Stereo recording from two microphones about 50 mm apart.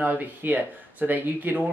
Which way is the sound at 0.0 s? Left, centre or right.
Right.